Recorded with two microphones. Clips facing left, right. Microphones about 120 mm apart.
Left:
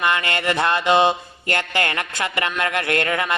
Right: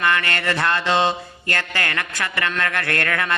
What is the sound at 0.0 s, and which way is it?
Speech, 20° left (ahead or behind).